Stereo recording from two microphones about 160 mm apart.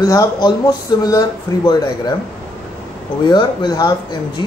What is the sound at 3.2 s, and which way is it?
Speech, 25° left (ahead or behind).